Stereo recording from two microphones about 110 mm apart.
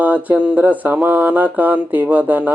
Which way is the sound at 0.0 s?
15° right (ahead or behind).